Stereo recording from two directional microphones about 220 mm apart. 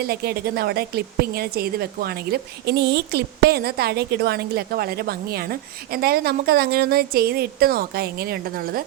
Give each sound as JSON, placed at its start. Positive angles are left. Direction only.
{"t": 0.0, "sound": "a woman's voice", "side_deg": -45}